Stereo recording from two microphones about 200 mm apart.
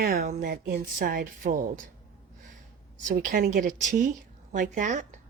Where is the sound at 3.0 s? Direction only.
45° right (ahead or behind).